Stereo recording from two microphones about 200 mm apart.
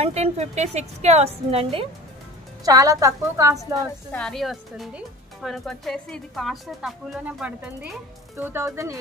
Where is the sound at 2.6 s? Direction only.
20° right (ahead or behind).